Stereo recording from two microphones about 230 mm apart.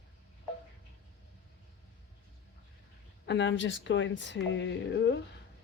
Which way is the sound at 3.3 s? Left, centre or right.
Left.